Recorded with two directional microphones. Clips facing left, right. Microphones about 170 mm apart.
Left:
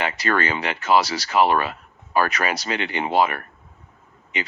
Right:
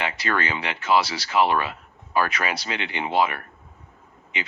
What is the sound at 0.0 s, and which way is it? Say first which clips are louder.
Speech: left 3 dB; 45° left (ahead or behind).